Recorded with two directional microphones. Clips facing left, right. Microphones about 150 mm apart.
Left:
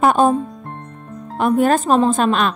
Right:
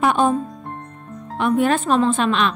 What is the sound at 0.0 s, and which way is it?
Speech, 40° left (ahead or behind).